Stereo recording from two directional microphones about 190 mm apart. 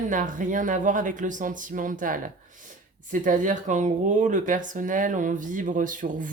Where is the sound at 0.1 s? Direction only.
45° right (ahead or behind).